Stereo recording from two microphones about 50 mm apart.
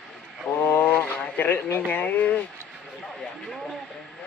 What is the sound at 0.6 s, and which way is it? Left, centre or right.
Speech, left.